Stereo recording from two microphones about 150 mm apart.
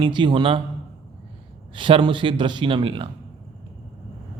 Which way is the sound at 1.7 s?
35° right (ahead or behind).